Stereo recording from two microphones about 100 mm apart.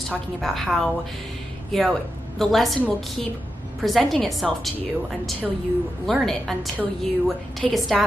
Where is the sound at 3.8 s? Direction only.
Centre (ahead or behind).